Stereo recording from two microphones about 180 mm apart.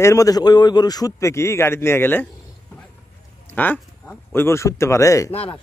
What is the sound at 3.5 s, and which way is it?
Speech, 10° left (ahead or behind).